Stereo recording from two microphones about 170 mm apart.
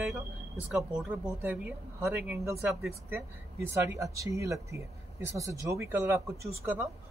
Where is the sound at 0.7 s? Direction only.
5° right (ahead or behind).